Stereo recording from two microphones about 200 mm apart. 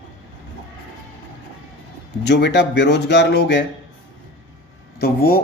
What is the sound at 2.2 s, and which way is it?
Speech, 60° left (ahead or behind).